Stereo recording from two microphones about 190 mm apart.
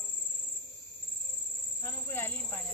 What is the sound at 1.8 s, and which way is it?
Speech, 10° left (ahead or behind).